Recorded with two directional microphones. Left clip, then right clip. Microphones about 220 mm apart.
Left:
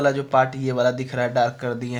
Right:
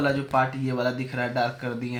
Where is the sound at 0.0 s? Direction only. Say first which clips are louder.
Left 5 dB; 45° left (ahead or behind).